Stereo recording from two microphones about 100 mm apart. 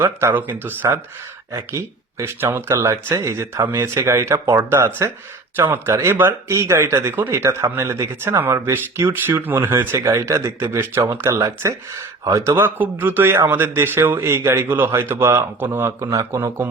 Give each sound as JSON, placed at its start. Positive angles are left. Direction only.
{"t": 0.0, "sound": "speech", "side_deg": -25}